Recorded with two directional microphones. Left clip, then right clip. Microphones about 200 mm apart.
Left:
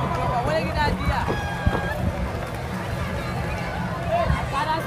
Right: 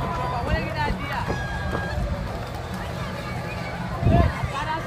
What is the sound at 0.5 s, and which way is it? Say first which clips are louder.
Music: left 4 dB; 50° left (ahead or behind).